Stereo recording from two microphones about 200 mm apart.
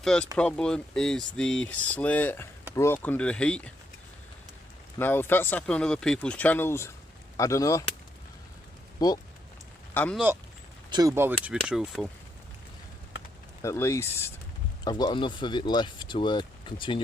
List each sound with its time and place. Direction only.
0.0 s speech: 5° left (ahead or behind)
4.9 s speech: 10° left (ahead or behind)
9.0 s speech: 20° left (ahead or behind)
9.9 s speech: 10° left (ahead or behind)
10.8 s speech: 20° right (ahead or behind); by 12.1 s centre (ahead or behind)
13.6 s speech: 15° left (ahead or behind)